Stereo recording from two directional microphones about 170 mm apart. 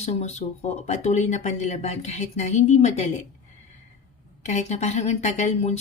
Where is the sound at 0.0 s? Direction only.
40° left (ahead or behind).